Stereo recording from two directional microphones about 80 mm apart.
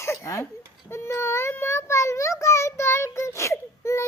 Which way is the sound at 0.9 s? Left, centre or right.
Left.